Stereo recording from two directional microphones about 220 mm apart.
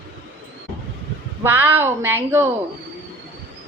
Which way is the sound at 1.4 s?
10° right (ahead or behind).